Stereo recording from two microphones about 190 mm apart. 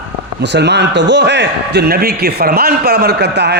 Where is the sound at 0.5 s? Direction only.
65° right (ahead or behind).